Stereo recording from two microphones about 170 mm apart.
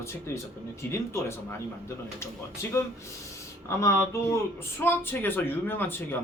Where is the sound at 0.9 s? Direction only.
15° left (ahead or behind).